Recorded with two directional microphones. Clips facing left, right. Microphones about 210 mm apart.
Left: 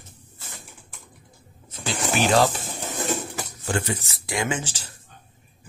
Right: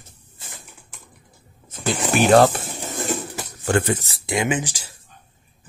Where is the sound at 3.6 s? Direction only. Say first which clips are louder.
Right 7 dB; 55° right (ahead or behind).